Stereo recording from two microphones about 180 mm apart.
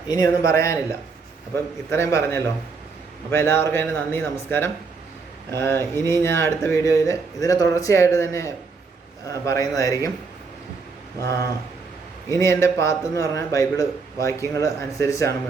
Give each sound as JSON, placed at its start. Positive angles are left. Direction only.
{"t": 0.1, "sound": "a man's voice", "side_deg": 20}
{"t": 11.2, "sound": "a man's voice", "side_deg": 20}